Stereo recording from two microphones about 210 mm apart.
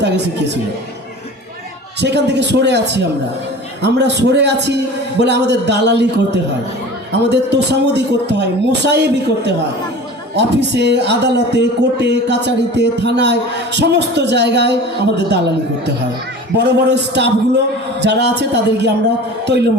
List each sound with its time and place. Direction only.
0.0 s a woman's voice: 55° right (ahead or behind)
2.0 s a man's voice: 55° right (ahead or behind)
3.8 s a man's voice: 55° right (ahead or behind)
16.6 s a man's voice: 55° right (ahead or behind)